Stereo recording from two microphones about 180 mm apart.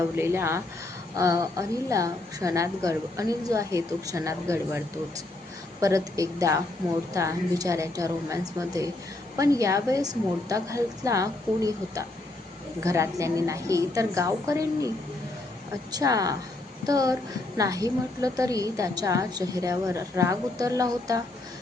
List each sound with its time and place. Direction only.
0.2 s a woman's voice: 15° right (ahead or behind)
5.8 s a woman's voice: 20° right (ahead or behind)
15.9 s a woman's voice: 20° right (ahead or behind)